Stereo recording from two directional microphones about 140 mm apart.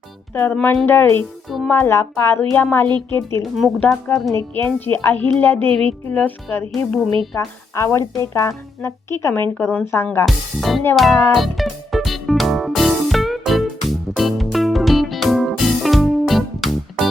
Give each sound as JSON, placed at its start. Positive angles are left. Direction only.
{"t": 0.3, "sound": "speech", "side_deg": 15}
{"t": 1.5, "sound": "speech", "side_deg": 0}
{"t": 1.7, "sound": "speech", "side_deg": 20}
{"t": 3.6, "sound": "speech", "side_deg": 0}
{"t": 4.3, "sound": "speech", "side_deg": 15}
{"t": 10.2, "sound": "speech", "side_deg": 0}
{"t": 10.9, "sound": "music", "side_deg": 0}